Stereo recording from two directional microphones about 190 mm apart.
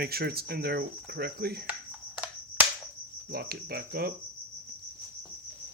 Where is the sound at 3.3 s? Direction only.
55° right (ahead or behind).